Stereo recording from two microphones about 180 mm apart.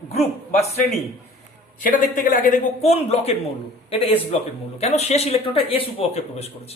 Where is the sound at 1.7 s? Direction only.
50° left (ahead or behind).